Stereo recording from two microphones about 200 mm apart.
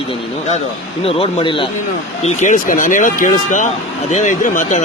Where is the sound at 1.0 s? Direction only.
30° left (ahead or behind).